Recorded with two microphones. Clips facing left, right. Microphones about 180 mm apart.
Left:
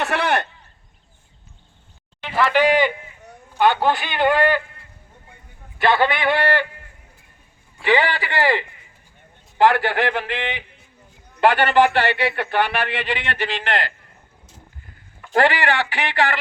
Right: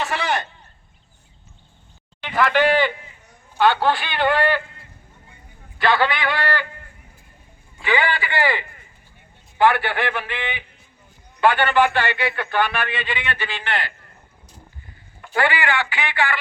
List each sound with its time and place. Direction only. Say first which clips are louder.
0.0 s speech: left 3 dB; 60° left (ahead or behind)
2.2 s speech: left 1 dB; 5° left (ahead or behind)
5.8 s a man's voice: left 2 dB; 25° left (ahead or behind)
7.8 s speech: left 3 dB; 35° left (ahead or behind)
11.4 s speech: left 2 dB; 35° left (ahead or behind)
15.3 s speech: left 3 dB; 40° left (ahead or behind)